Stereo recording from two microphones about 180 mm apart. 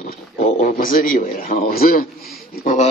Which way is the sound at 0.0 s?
45° left (ahead or behind).